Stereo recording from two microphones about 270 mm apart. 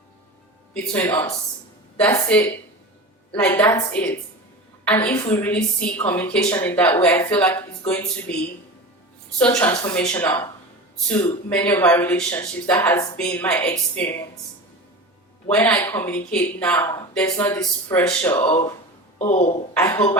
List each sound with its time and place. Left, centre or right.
0.7 s a woman's voice: centre
9.4 s a woman's voice: centre
15.4 s speech: centre
19.2 s speech: left
19.7 s speech: centre